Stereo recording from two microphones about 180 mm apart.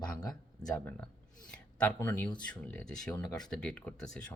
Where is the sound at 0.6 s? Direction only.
5° left (ahead or behind).